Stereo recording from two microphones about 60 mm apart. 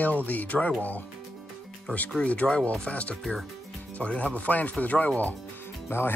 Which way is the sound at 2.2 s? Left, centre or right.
Left.